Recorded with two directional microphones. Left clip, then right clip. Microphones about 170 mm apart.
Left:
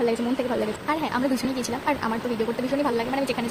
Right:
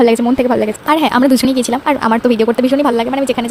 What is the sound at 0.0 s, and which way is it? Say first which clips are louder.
A woman's voice: right 13 dB; 60° right (ahead or behind).